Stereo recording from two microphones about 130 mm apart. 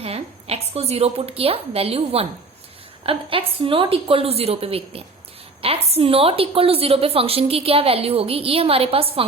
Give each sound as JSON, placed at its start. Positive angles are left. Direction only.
{"t": 0.0, "sound": "a woman's voice", "side_deg": -50}